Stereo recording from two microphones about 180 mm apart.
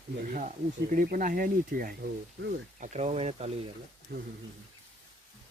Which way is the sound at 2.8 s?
40° right (ahead or behind).